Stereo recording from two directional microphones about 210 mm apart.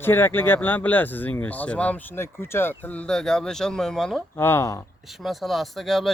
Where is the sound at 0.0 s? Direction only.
10° left (ahead or behind).